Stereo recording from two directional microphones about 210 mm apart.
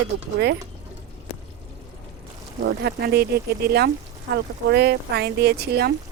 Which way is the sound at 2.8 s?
50° right (ahead or behind).